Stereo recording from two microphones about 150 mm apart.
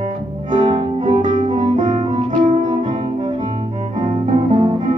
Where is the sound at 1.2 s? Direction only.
60° right (ahead or behind).